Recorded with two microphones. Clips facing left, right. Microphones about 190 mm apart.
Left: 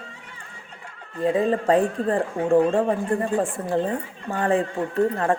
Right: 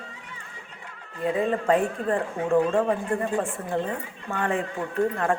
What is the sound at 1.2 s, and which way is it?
Speech, 35° left (ahead or behind).